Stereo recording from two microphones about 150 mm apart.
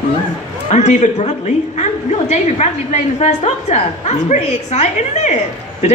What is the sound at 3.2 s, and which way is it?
A woman's voice, 50° left (ahead or behind).